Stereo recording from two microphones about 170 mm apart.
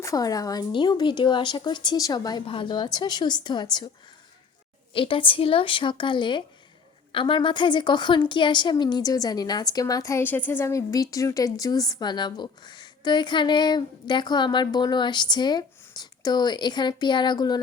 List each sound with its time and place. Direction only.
0.0 s a woman's voice: 20° left (ahead or behind)
4.9 s a woman's voice: 30° left (ahead or behind)